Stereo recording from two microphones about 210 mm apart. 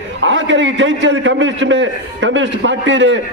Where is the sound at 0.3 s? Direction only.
60° right (ahead or behind).